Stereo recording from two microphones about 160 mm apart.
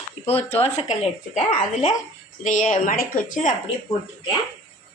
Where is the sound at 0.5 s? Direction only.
40° left (ahead or behind); by 3.5 s 55° left (ahead or behind).